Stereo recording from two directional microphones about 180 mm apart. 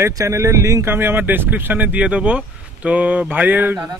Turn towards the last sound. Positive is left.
turn(degrees=-15)  # may be behind; listen again after turning